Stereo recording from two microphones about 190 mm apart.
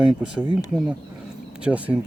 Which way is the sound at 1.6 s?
5° right (ahead or behind).